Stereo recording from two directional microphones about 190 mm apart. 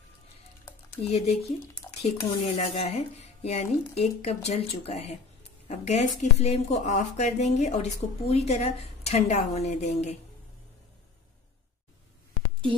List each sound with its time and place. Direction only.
1.0 s a woman's voice: 30° left (ahead or behind)